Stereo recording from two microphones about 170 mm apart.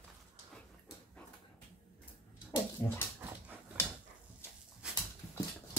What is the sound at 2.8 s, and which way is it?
Dog, 20° left (ahead or behind).